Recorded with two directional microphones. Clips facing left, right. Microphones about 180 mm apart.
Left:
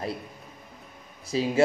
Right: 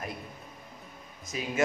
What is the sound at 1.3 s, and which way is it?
Speech, 30° left (ahead or behind).